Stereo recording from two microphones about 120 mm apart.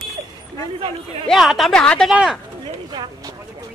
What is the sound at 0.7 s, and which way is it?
Speech, 45° right (ahead or behind).